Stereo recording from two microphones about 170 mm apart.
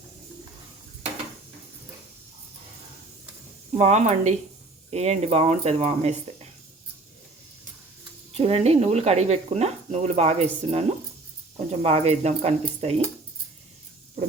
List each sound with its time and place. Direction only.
3.8 s speech: 40° right (ahead or behind)
8.3 s speech: 35° right (ahead or behind)